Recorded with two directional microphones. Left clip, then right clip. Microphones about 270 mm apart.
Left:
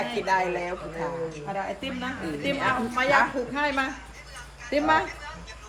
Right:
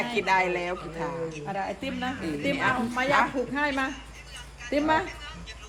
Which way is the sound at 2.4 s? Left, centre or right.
Right.